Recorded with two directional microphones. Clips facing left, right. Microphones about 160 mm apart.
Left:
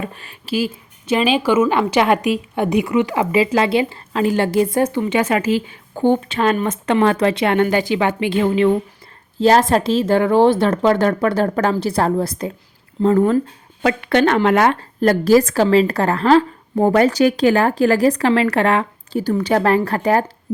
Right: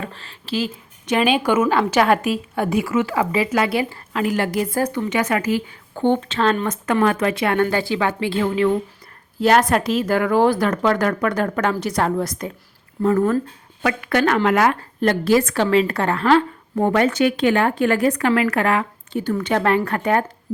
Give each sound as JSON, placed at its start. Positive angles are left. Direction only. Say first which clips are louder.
{"t": 0.0, "sound": "a woman's voice", "louder": "left 3 dB", "side_deg": 15}
{"t": 6.0, "sound": "speech", "louder": "left 2 dB", "side_deg": 10}
{"t": 6.7, "sound": "a woman's voice", "louder": "left 3 dB", "side_deg": 30}